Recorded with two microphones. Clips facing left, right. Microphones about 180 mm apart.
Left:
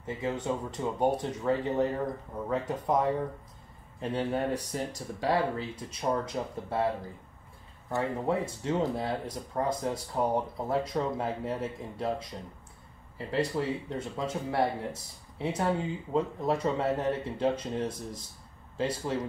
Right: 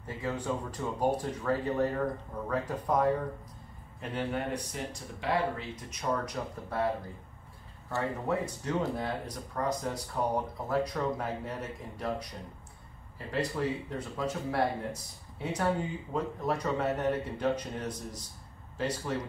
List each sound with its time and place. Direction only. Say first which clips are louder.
0.0 s speech: left 3 dB; 25° left (ahead or behind)
7.9 s speech: left 2 dB; 25° left (ahead or behind)
13.6 s speech: left 1 dB; 25° left (ahead or behind)